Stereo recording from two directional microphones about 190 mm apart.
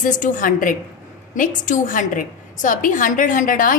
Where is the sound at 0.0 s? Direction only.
45° left (ahead or behind).